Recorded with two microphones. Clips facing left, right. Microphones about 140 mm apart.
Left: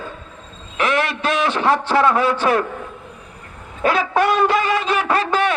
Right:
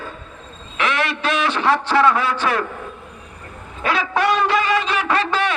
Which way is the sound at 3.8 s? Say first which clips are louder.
Left 2 dB; 45° left (ahead or behind).